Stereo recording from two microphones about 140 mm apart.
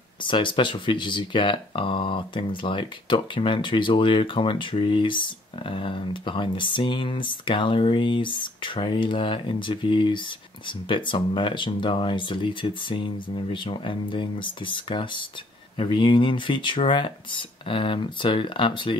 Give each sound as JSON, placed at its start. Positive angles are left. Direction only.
{"t": 0.2, "sound": "speech", "side_deg": 35}